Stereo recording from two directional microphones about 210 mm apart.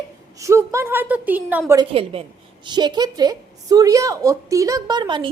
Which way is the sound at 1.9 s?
25° right (ahead or behind).